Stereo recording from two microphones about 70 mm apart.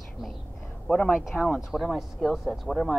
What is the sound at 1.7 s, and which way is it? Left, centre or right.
Speech, centre.